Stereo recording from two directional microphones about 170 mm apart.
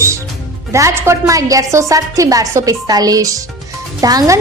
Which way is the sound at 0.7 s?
15° right (ahead or behind).